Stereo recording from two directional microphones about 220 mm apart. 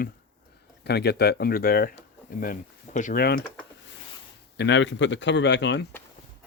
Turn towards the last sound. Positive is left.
turn(degrees=55)  # may be behind; listen again after turning